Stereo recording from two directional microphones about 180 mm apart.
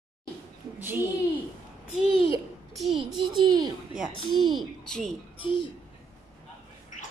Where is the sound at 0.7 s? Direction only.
10° right (ahead or behind).